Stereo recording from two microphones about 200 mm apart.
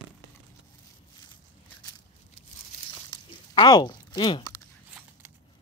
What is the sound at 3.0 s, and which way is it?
Crunch, 20° left (ahead or behind).